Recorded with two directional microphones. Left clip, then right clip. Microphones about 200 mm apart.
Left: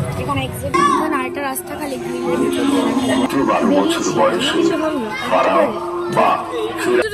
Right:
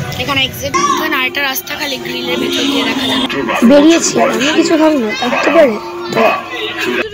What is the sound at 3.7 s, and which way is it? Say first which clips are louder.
Speech: right 9 dB; 35° right (ahead or behind).